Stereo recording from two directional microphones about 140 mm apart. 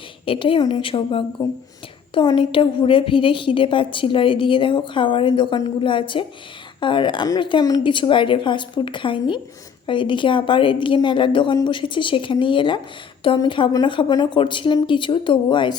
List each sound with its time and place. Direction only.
0.3 s a woman's voice: 40° left (ahead or behind)
1.4 s speech: 25° left (ahead or behind)
2.1 s a woman's voice: 35° left (ahead or behind)